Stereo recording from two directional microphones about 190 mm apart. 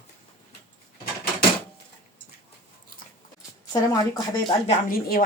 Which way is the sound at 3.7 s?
20° left (ahead or behind).